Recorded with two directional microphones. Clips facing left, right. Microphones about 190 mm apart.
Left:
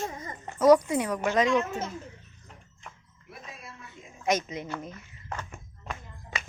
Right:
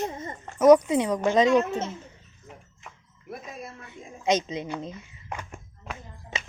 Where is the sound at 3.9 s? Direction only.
20° right (ahead or behind).